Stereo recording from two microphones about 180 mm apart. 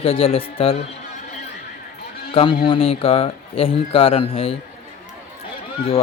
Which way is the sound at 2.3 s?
30° left (ahead or behind).